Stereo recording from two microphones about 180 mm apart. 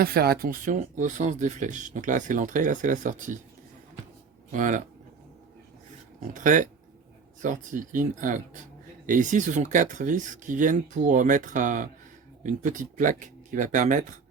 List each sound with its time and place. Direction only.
0.0 s speech: 55° right (ahead or behind)
4.5 s speech: 45° right (ahead or behind)
6.3 s speech: 45° right (ahead or behind)